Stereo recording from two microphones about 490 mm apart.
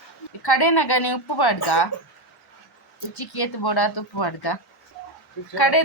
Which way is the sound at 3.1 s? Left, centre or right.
Left.